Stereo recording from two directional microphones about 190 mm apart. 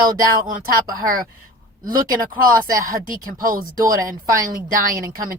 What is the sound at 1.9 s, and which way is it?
Speech, 20° right (ahead or behind).